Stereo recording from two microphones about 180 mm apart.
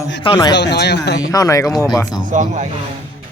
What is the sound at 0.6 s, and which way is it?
Speech, 70° left (ahead or behind).